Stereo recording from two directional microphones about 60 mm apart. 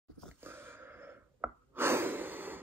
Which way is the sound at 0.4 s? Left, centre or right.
Right.